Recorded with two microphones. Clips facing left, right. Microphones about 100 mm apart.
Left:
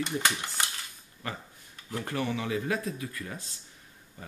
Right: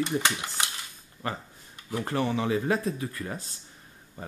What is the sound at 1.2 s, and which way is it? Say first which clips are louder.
Speech: right 5 dB; 35° right (ahead or behind).